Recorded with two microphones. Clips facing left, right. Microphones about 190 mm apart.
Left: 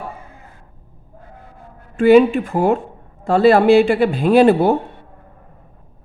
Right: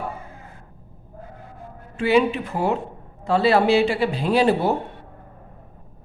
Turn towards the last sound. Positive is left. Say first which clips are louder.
# left 7 dB
turn(degrees=55)  # may be behind; listen again after turning